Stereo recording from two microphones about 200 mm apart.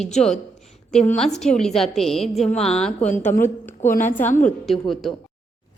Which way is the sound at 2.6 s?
30° left (ahead or behind).